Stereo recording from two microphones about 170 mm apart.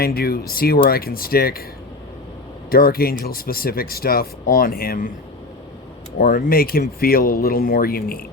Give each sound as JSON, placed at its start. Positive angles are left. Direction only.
{"t": 0.0, "sound": "speech", "side_deg": 65}
{"t": 2.6, "sound": "speech", "side_deg": 60}
{"t": 6.1, "sound": "speech", "side_deg": 60}